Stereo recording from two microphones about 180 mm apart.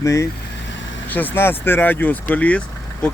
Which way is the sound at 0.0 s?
15° left (ahead or behind).